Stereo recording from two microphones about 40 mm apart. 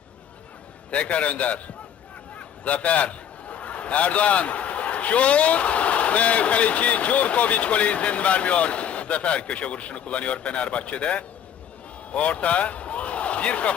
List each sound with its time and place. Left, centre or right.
0.9 s a man's voice: left